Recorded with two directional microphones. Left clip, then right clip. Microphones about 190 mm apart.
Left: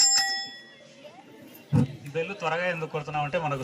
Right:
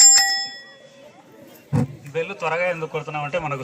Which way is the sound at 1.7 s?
25° left (ahead or behind).